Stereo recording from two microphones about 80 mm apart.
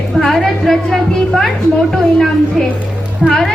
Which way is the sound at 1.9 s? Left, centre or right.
Centre.